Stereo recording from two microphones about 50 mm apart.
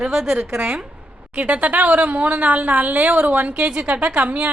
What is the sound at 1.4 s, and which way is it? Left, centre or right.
A woman's voice, right.